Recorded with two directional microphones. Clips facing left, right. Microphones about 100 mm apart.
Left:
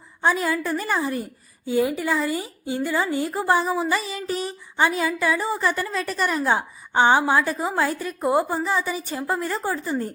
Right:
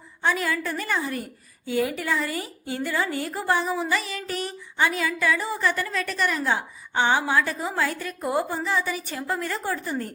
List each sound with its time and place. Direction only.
0.2 s a woman's voice: 35° left (ahead or behind)
2.0 s a woman's voice: 35° left (ahead or behind)
2.3 s a woman's voice: 25° left (ahead or behind)